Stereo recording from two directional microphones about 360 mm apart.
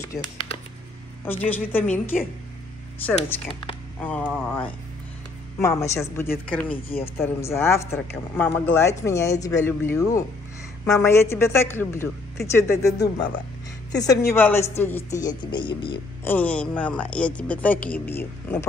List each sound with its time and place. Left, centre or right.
0.0 s speech: centre
6.7 s speech: left
7.2 s speech: centre
14.3 s speech: centre